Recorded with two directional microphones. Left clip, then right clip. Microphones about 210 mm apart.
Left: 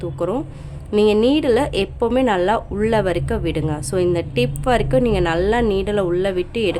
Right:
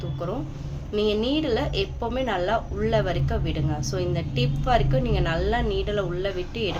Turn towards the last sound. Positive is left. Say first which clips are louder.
# left 8 dB
turn(degrees=50)  # may be behind; listen again after turning